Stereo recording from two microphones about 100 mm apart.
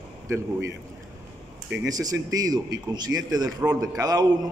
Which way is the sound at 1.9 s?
40° right (ahead or behind).